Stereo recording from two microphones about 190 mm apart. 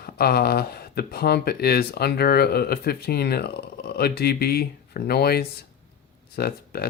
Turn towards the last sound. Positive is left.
turn(degrees=55)  # may be behind; listen again after turning